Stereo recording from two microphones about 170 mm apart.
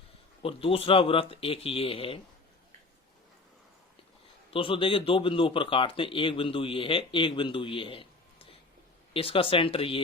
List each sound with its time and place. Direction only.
0.4 s speech: 35° left (ahead or behind)
4.5 s speech: 30° left (ahead or behind)
9.1 s speech: 30° left (ahead or behind)